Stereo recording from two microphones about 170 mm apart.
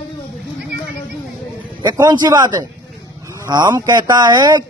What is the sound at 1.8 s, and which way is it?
Speech, 25° right (ahead or behind).